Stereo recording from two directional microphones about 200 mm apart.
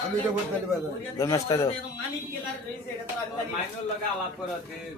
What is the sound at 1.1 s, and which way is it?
Speech, 15° left (ahead or behind).